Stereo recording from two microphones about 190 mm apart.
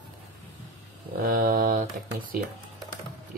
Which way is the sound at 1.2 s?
50° right (ahead or behind).